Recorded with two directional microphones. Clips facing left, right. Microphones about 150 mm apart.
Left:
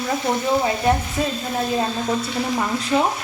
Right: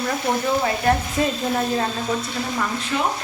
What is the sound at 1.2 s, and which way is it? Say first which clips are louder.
Speech: right 2 dB; centre (ahead or behind).